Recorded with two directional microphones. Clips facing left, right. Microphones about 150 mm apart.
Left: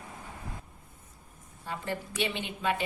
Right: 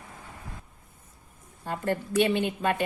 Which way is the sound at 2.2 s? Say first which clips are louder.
Right 10 dB; 50° right (ahead or behind).